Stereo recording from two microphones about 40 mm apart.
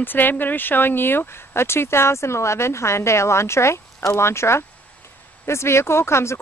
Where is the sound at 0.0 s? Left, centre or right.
Left.